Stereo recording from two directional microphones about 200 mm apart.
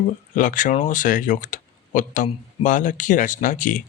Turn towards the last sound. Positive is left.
turn(degrees=40)  # may be behind; listen again after turning